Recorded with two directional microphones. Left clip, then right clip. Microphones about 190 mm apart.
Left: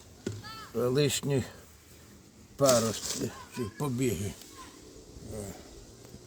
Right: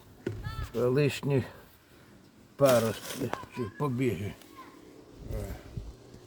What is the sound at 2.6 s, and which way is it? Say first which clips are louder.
Speech: right 1 dB; 25° right (ahead or behind).